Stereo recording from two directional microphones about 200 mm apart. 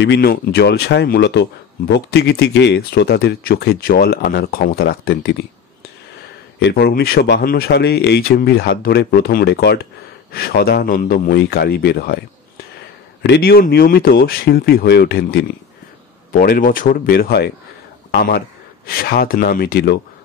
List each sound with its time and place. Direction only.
0.0 s speech: 55° left (ahead or behind)
6.6 s speech: 50° left (ahead or behind)
13.2 s a man's voice: 55° left (ahead or behind)